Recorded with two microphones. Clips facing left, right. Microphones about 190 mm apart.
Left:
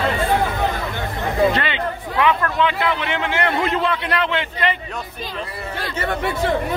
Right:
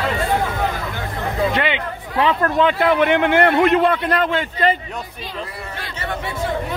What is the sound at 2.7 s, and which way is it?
A man's voice, 50° right (ahead or behind).